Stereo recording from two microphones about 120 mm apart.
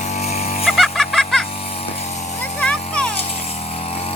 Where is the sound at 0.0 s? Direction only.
70° left (ahead or behind).